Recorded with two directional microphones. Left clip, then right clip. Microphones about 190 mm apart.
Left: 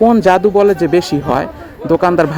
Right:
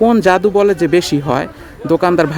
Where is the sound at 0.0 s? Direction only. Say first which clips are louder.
Left 1 dB; 25° right (ahead or behind).